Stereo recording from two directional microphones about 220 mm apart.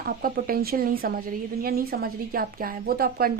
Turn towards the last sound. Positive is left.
turn(degrees=-45)  # may be behind; listen again after turning